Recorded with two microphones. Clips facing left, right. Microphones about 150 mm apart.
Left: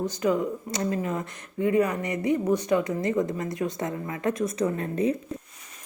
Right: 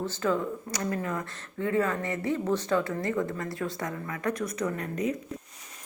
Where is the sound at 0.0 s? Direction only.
15° left (ahead or behind).